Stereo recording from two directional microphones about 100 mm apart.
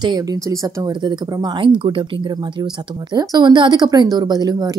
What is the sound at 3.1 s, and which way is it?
Speech, 45° right (ahead or behind).